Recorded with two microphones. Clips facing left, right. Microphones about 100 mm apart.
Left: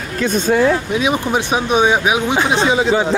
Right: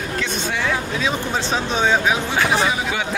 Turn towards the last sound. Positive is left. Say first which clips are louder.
# left 8 dB
turn(degrees=30)  # may be behind; listen again after turning